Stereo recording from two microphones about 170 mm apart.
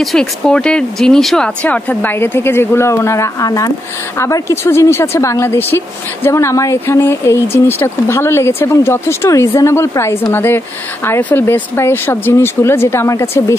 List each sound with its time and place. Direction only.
0.0 s speech: 5° left (ahead or behind)